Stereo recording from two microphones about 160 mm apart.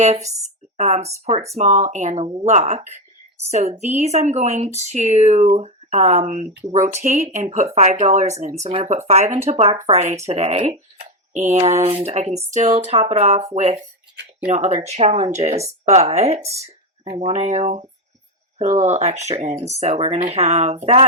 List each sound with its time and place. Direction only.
0.0 s speech: 45° right (ahead or behind)
16.4 s speech: 15° right (ahead or behind)
16.6 s speech: 40° right (ahead or behind)